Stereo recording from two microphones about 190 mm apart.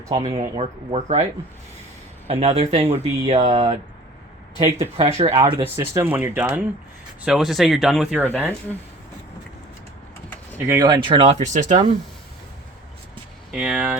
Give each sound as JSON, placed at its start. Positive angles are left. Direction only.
{"t": 0.1, "sound": "speech", "side_deg": -30}
{"t": 2.2, "sound": "speech", "side_deg": -30}
{"t": 4.8, "sound": "speech", "side_deg": -30}
{"t": 5.6, "sound": "speech", "side_deg": -15}
{"t": 8.3, "sound": "speech", "side_deg": 10}
{"t": 10.7, "sound": "speech", "side_deg": -20}
{"t": 13.5, "sound": "speech", "side_deg": -5}